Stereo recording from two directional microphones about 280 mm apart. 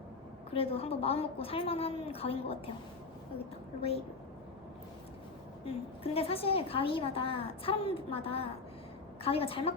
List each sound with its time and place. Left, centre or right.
0.5 s a woman's voice: left
3.8 s a woman's voice: left
5.6 s a woman's voice: left